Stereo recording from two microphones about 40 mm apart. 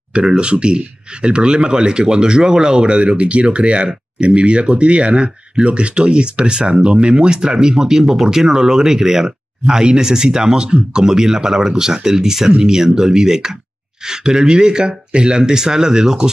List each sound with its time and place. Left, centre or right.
0.1 s speech: right